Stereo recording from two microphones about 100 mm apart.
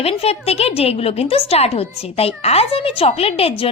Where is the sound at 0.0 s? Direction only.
90° left.